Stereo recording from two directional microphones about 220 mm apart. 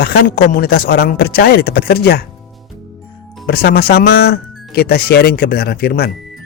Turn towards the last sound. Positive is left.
turn(degrees=45)  # may be behind; listen again after turning